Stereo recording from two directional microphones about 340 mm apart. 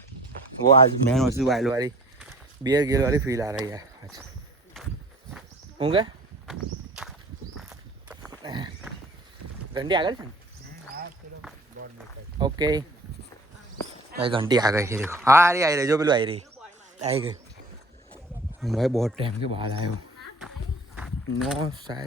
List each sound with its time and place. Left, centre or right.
1.0 s speech: centre
5.8 s speech: centre
6.5 s walk: centre
9.7 s speech: centre
11.8 s speech: right
12.4 s speech: centre
14.1 s speech: centre
18.6 s speech: centre
19.1 s speech: centre
20.9 s walk: centre
21.6 s speech: centre